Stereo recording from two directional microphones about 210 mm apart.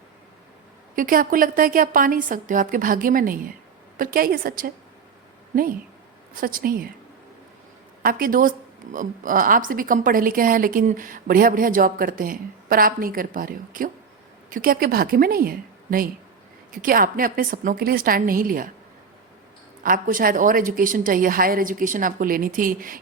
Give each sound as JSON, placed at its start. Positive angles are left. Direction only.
{"t": 0.9, "sound": "a woman's voice", "side_deg": -40}
{"t": 6.3, "sound": "a woman's voice", "side_deg": -40}
{"t": 8.0, "sound": "a woman's voice", "side_deg": -40}
{"t": 19.8, "sound": "a woman's voice", "side_deg": -40}